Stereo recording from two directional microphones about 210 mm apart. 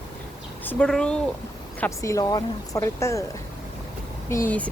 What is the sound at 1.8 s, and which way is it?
Speech, 15° left (ahead or behind).